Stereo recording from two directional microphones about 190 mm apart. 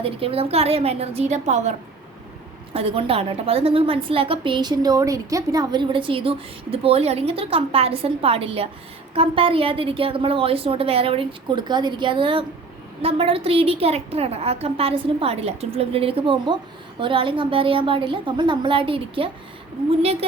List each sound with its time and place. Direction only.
0.0 s a woman's voice: 30° right (ahead or behind)
2.7 s a woman's voice: 30° right (ahead or behind)